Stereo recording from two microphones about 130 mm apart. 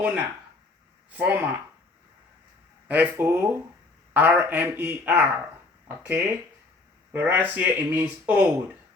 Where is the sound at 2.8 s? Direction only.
10° right (ahead or behind).